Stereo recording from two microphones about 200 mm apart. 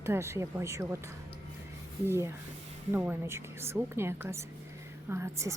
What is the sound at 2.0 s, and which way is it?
A woman's voice, 10° right (ahead or behind).